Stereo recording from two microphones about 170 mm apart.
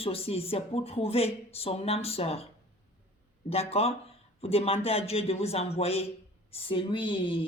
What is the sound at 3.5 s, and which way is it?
Speech, 35° left (ahead or behind).